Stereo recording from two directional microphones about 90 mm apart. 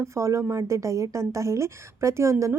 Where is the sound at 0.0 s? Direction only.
35° right (ahead or behind).